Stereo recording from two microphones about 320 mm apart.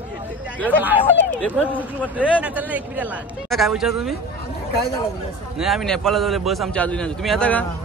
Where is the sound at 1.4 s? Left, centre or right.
Centre.